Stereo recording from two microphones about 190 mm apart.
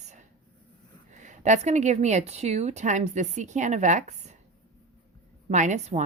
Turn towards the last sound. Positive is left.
turn(degrees=-40)  # may be behind; listen again after turning